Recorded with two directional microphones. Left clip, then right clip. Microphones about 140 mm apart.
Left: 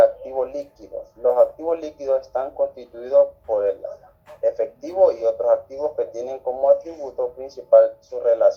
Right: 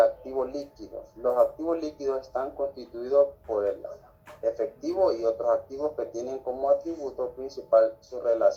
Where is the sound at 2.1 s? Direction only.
45° left (ahead or behind).